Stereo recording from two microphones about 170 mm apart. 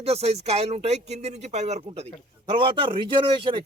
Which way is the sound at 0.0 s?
35° right (ahead or behind).